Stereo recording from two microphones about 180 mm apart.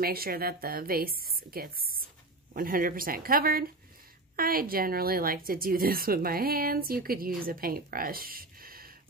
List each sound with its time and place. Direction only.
0.0 s speech: 55° right (ahead or behind)